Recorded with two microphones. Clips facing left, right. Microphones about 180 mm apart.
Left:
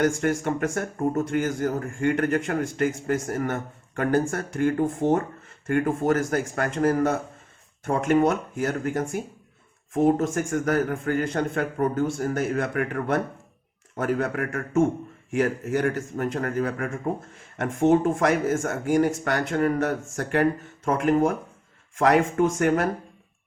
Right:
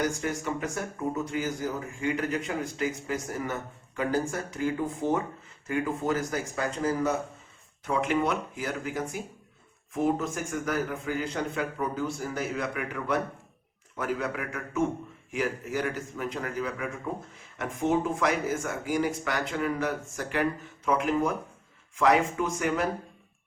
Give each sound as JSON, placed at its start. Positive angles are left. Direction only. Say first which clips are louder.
{"t": 0.0, "sound": "speech", "louder": "left 7 dB", "side_deg": 55}
{"t": 17.6, "sound": "speech", "louder": "left 7 dB", "side_deg": 75}
{"t": 17.8, "sound": "speech", "louder": "left 6 dB", "side_deg": 50}